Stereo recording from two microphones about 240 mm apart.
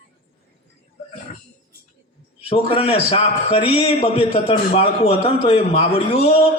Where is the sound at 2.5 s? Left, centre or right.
Left.